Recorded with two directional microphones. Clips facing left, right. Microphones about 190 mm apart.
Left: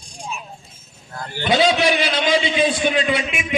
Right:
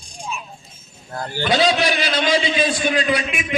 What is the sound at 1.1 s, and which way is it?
Speech, 35° right (ahead or behind).